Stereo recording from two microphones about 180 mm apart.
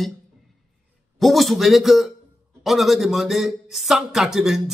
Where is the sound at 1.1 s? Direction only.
Centre (ahead or behind).